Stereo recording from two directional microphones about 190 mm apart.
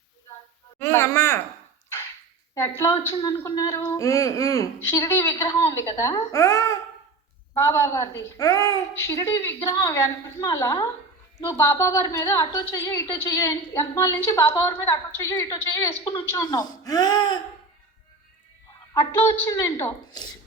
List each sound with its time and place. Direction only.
0.8 s a woman's voice: 15° left (ahead or behind)
2.6 s a woman's voice: 15° left (ahead or behind)
18.9 s a woman's voice: 15° left (ahead or behind)